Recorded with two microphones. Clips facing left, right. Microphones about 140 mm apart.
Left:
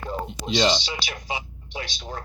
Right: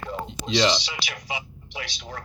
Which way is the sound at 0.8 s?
30° left (ahead or behind).